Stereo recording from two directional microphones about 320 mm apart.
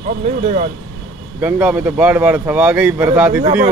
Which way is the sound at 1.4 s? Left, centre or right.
Centre.